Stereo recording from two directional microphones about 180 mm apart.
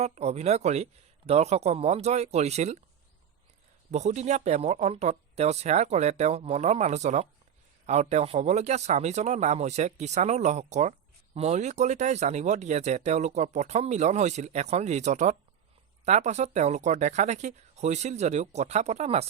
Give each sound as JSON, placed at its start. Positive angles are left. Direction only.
{"t": 0.0, "sound": "speech", "side_deg": -35}
{"t": 3.9, "sound": "speech", "side_deg": -40}